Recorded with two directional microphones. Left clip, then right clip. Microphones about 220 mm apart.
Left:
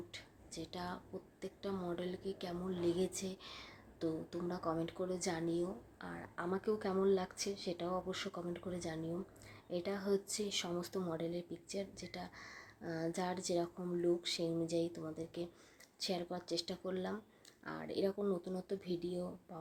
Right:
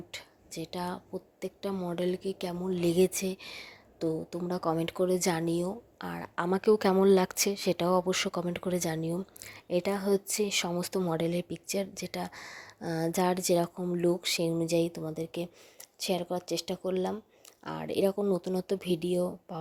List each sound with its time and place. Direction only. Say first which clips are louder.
0.1 s a woman's voice: right 8 dB; 35° right (ahead or behind)